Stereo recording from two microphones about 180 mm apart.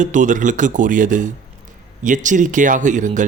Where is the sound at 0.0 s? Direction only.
45° right (ahead or behind).